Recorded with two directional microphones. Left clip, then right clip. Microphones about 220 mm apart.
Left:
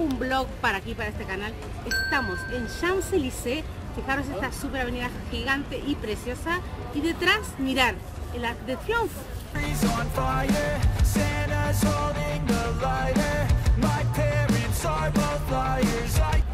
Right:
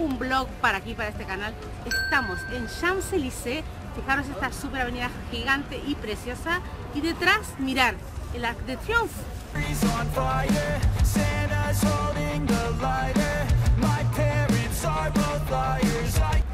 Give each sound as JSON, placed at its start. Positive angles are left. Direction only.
{"t": 0.2, "sound": "a woman's voice", "side_deg": -5}
{"t": 9.6, "sound": "music", "side_deg": 0}